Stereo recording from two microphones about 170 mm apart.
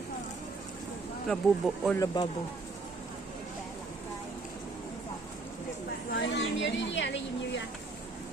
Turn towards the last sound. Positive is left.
turn(degrees=90)